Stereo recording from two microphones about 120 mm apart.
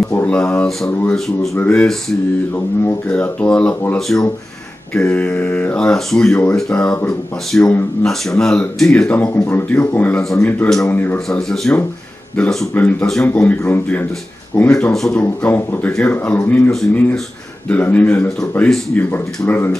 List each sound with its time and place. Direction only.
0.1 s speech: 15° left (ahead or behind)
11.2 s speech: 5° left (ahead or behind)